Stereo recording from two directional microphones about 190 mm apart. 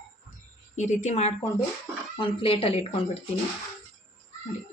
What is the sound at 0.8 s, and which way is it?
Speech, 40° left (ahead or behind).